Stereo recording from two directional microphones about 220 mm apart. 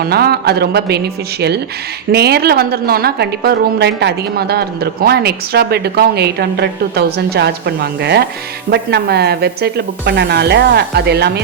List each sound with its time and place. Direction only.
0.0 s a woman's voice: 45° right (ahead or behind)